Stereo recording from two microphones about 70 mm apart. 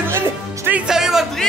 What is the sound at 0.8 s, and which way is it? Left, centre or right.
Speech, centre.